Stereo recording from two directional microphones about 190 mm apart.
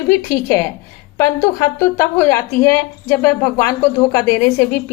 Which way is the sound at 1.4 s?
15° left (ahead or behind).